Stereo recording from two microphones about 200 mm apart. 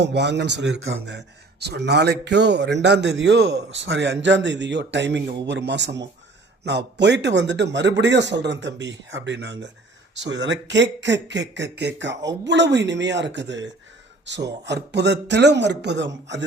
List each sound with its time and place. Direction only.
0.0 s a man's voice: 60° right (ahead or behind)